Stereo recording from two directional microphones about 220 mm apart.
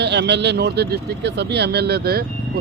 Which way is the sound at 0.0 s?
50° right (ahead or behind).